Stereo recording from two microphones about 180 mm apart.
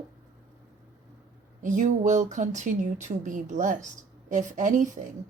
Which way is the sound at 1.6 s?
45° right (ahead or behind).